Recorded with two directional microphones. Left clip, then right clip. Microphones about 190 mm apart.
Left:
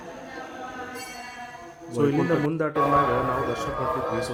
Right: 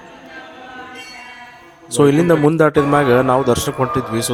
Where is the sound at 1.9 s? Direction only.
60° right (ahead or behind).